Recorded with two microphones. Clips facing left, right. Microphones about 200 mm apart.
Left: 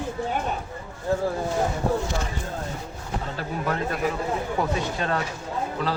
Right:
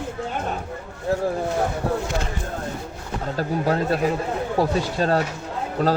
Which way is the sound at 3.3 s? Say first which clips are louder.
Right 7 dB; 35° right (ahead or behind).